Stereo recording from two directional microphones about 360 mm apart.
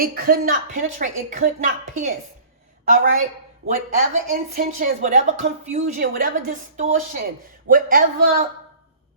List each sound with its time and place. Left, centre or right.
0.0 s a woman's voice: right
2.8 s a woman's voice: right